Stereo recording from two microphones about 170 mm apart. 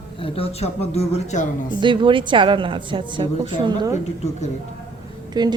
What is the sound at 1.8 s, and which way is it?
A woman's voice, 30° right (ahead or behind).